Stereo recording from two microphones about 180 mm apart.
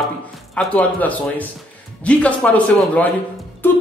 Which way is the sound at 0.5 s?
10° left (ahead or behind).